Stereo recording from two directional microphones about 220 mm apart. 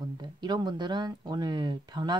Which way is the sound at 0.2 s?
20° right (ahead or behind).